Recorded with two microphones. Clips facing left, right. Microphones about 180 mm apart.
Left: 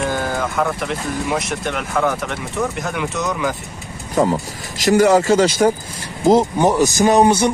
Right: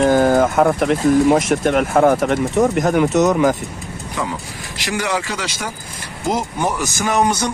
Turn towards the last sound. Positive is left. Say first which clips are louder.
# left 5 dB
turn(degrees=30)  # may be behind; listen again after turning